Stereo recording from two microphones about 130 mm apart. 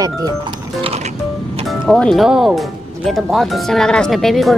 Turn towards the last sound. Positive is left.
turn(degrees=0)  # may be behind; listen again after turning